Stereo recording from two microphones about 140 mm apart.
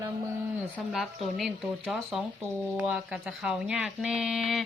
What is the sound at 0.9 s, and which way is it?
Speech, centre (ahead or behind).